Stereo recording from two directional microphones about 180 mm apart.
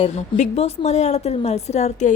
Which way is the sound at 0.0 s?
40° left (ahead or behind).